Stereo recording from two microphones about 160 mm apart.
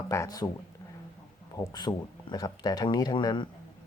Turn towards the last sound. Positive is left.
turn(degrees=25)  # may be behind; listen again after turning